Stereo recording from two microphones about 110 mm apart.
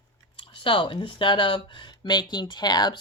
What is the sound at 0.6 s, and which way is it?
Speech, 50° left (ahead or behind).